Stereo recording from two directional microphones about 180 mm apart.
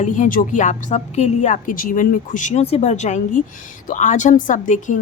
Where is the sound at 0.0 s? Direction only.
45° left (ahead or behind).